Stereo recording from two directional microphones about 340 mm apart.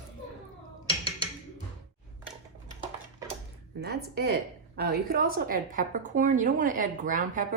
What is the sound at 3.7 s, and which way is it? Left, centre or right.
Speech, right.